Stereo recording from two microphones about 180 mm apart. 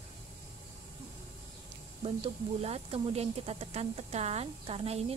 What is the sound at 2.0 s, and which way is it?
Speech, 35° right (ahead or behind).